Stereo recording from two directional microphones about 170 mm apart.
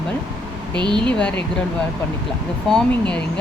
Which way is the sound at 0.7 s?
25° right (ahead or behind).